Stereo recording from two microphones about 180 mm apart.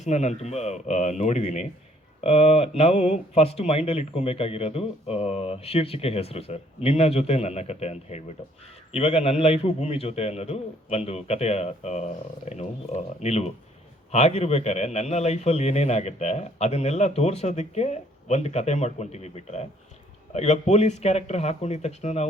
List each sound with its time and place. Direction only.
0.0 s a man's voice: 40° left (ahead or behind)